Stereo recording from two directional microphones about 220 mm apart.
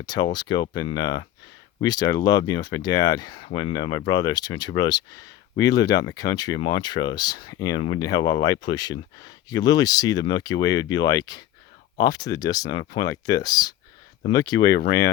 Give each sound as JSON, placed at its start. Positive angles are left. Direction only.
{"t": 0.0, "sound": "speech", "side_deg": 20}